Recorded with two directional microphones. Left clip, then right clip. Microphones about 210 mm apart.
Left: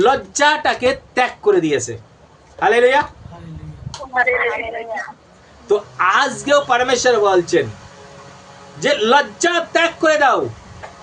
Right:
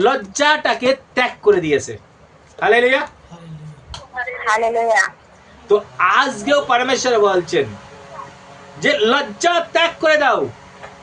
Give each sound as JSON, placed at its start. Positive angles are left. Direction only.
{"t": 0.0, "sound": "speech", "side_deg": 5}
{"t": 4.1, "sound": "speech", "side_deg": 25}
{"t": 4.4, "sound": "speech", "side_deg": -55}
{"t": 5.6, "sound": "a man's voice", "side_deg": 5}
{"t": 8.8, "sound": "speech", "side_deg": 5}